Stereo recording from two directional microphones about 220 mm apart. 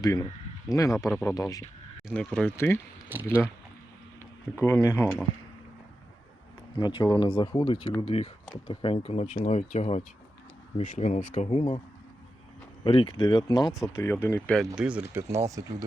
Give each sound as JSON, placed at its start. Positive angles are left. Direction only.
{"t": 0.0, "sound": "speech", "side_deg": 15}
{"t": 2.0, "sound": "speech", "side_deg": 5}
{"t": 3.1, "sound": "speech", "side_deg": -10}
{"t": 4.6, "sound": "speech", "side_deg": 10}
{"t": 6.7, "sound": "speech", "side_deg": 20}
{"t": 12.8, "sound": "speech", "side_deg": 25}